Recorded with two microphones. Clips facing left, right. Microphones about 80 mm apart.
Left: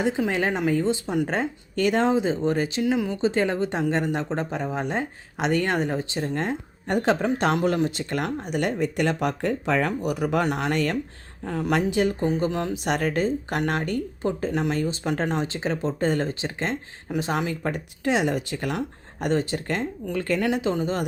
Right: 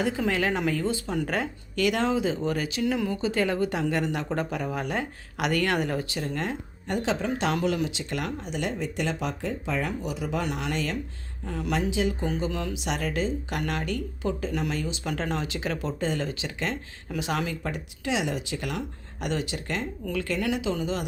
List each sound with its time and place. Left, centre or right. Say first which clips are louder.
0.3 s speech: left 2 dB; left
1.3 s speech: left 3 dB; left
12.5 s speech: left 4 dB; left
12.7 s speech: left 5 dB; left
16.0 s speech: left 5 dB; left